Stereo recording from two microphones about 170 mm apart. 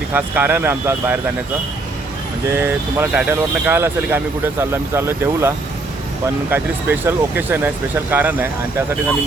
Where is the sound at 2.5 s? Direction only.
15° right (ahead or behind).